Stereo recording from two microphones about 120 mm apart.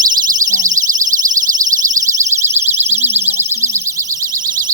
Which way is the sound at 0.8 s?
25° right (ahead or behind).